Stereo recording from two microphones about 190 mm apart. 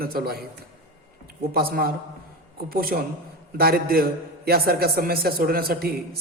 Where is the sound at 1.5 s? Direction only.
50° right (ahead or behind).